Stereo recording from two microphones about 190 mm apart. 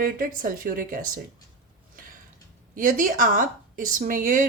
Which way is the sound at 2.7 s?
45° right (ahead or behind).